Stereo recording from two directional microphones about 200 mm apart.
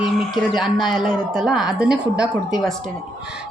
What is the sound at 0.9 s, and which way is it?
Speech, centre (ahead or behind).